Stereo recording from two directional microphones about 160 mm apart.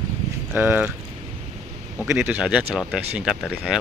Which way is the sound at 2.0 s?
15° right (ahead or behind).